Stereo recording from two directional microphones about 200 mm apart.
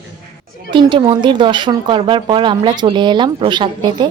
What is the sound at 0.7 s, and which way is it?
Speech, 25° right (ahead or behind).